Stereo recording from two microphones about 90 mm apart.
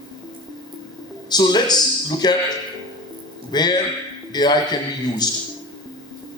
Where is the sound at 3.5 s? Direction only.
50° left (ahead or behind).